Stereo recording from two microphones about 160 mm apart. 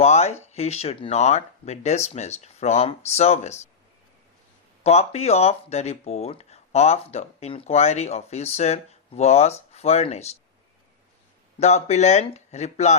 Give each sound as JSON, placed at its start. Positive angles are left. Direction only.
{"t": 0.0, "sound": "speech", "side_deg": 45}
{"t": 4.8, "sound": "speech", "side_deg": 40}
{"t": 11.6, "sound": "speech", "side_deg": 45}